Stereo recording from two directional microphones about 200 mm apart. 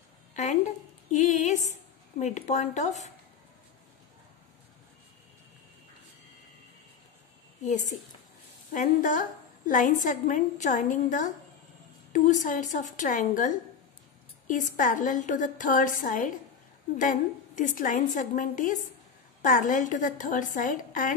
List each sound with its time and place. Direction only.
0.3 s a sound: 40° left (ahead or behind)
1.1 s a woman's voice: 40° left (ahead or behind)
8.7 s a woman's voice: 40° left (ahead or behind)
14.5 s a woman's voice: 40° left (ahead or behind)